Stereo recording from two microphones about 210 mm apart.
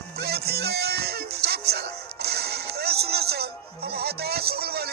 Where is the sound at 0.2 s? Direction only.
50° right (ahead or behind).